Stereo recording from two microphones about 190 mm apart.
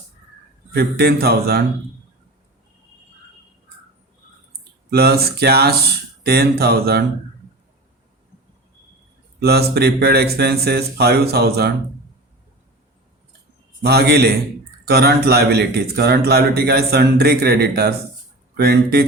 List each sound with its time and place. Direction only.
0.7 s a man's voice: 55° right (ahead or behind)
4.9 s a man's voice: 55° right (ahead or behind)
9.4 s a man's voice: 55° right (ahead or behind)
13.8 s a man's voice: 55° right (ahead or behind)